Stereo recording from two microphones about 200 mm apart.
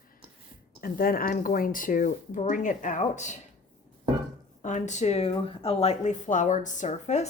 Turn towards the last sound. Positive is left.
turn(degrees=35)  # may be behind; listen again after turning